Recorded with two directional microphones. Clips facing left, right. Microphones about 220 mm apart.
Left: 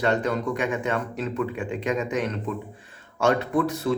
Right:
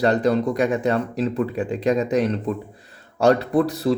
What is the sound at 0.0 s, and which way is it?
Speech, 35° right (ahead or behind).